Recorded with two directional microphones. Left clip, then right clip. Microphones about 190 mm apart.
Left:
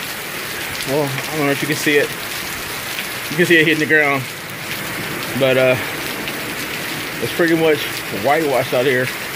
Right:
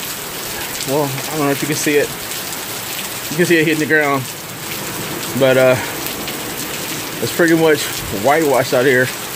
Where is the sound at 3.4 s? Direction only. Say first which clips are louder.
Left 1 dB; 5° right (ahead or behind).